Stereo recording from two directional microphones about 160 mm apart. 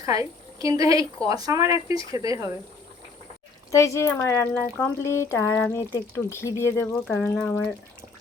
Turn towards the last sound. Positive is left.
turn(degrees=5)  # may be behind; listen again after turning